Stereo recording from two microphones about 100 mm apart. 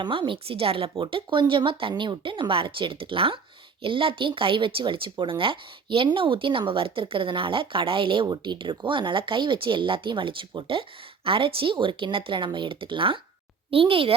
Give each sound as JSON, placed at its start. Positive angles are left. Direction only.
{"t": 0.0, "sound": "a woman's voice", "side_deg": -60}